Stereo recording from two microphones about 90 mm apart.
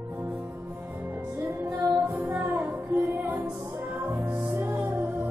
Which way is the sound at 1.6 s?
25° right (ahead or behind).